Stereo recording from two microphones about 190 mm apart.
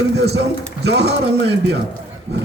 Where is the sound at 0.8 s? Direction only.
60° right (ahead or behind).